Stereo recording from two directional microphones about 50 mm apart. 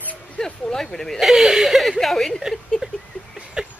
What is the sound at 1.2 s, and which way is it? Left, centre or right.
Speech, centre.